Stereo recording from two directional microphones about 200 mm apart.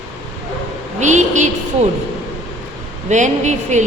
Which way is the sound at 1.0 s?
35° right (ahead or behind).